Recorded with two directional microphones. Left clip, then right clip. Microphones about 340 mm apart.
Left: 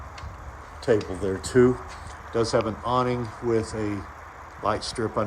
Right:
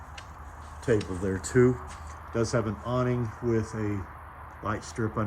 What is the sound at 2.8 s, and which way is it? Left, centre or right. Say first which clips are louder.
Speech: left 5 dB; left.